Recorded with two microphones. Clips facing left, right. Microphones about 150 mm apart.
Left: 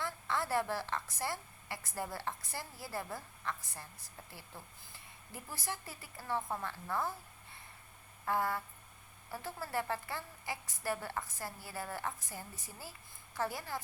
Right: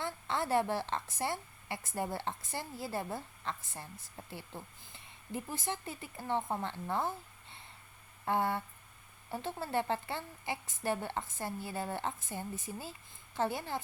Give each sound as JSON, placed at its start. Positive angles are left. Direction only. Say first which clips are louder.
{"t": 0.0, "sound": "a sound", "louder": "right 2 dB", "side_deg": -20}
{"t": 1.1, "sound": "a woman's voice", "louder": "right 3 dB", "side_deg": -20}
{"t": 8.2, "sound": "a woman's voice", "louder": "right 2 dB", "side_deg": -25}